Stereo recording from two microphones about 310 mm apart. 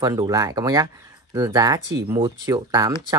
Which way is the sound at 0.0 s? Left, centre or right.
Centre.